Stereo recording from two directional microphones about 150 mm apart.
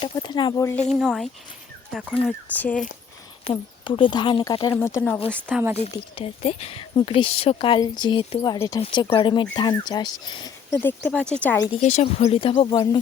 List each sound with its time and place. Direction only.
0.0 s speech: 30° left (ahead or behind)
0.9 s speech: 5° right (ahead or behind)
3.5 s speech: 35° left (ahead or behind)
4.7 s speech: 15° left (ahead or behind)
5.5 s speech: 10° right (ahead or behind)
6.1 s speech: 40° left (ahead or behind)
10.7 s speech: 15° left (ahead or behind)
11.7 s speech: 45° left (ahead or behind); by 13.0 s 30° left (ahead or behind)